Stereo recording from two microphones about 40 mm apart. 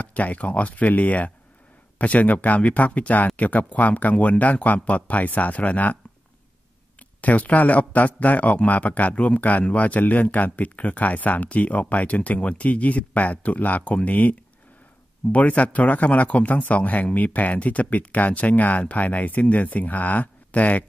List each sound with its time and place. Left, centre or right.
0.0 s a man's voice: left
7.2 s a man's voice: left
15.3 s a man's voice: left